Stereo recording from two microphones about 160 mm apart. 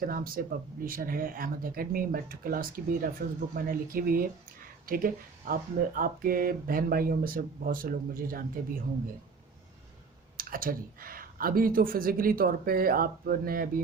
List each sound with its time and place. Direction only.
0.0 s speech: 65° right (ahead or behind)
10.3 s speech: 65° right (ahead or behind)